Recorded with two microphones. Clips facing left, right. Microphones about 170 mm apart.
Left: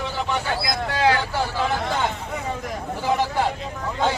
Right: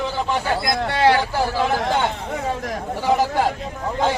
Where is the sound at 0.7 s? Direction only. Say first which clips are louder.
Right 3 dB; 70° right (ahead or behind).